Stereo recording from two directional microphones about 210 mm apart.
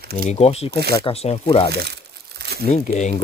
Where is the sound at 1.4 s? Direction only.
20° left (ahead or behind).